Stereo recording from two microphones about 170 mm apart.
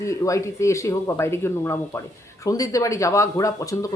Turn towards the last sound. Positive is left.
turn(degrees=20)  # may be behind; listen again after turning